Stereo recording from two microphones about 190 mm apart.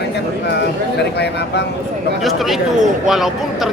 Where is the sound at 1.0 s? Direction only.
65° left (ahead or behind).